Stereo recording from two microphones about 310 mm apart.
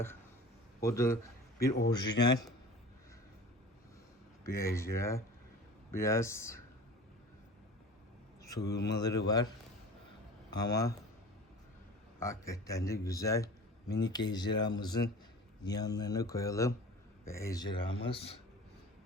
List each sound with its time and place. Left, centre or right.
0.9 s a man's voice: centre
1.5 s a man's voice: left
1.9 s a man's voice: centre
4.4 s a man's voice: centre
8.4 s a man's voice: centre
10.5 s a man's voice: centre
12.2 s a man's voice: centre